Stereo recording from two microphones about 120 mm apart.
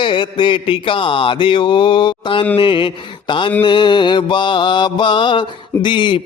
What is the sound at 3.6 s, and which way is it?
Mantra, 40° left (ahead or behind).